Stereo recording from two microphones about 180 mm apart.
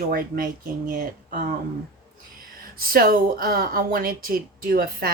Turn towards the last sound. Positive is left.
turn(degrees=-55)  # may be behind; listen again after turning